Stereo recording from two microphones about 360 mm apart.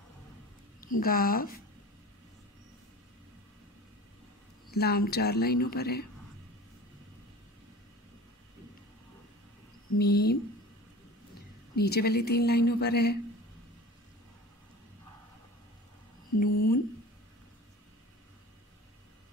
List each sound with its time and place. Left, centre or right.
0.7 s a woman's voice: left
4.6 s a woman's voice: left
9.9 s a woman's voice: left
11.7 s a woman's voice: left
16.3 s a sound: left